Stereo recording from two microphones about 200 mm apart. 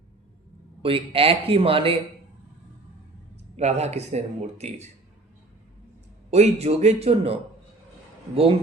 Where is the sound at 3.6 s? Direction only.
35° right (ahead or behind).